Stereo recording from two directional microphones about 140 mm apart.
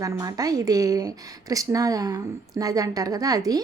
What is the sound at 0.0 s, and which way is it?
A woman's voice, 25° right (ahead or behind).